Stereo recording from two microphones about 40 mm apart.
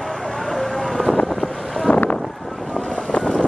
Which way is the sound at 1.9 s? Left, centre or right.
Left.